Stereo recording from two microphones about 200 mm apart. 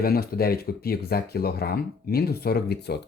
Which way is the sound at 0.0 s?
50° left (ahead or behind).